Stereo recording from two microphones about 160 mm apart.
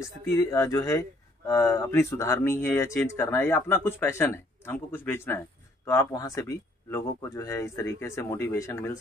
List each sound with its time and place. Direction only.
0.0 s speech: 20° left (ahead or behind)